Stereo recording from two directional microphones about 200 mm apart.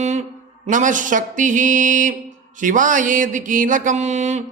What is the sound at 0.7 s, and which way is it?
Mantra, 40° right (ahead or behind).